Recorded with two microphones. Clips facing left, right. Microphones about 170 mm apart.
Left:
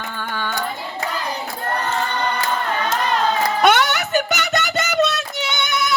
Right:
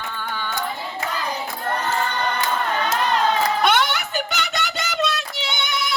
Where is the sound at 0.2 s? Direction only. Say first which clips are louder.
Left 4 dB; 55° left (ahead or behind).